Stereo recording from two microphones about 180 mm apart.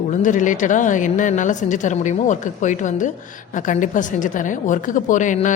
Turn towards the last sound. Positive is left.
turn(degrees=45)  # may be behind; listen again after turning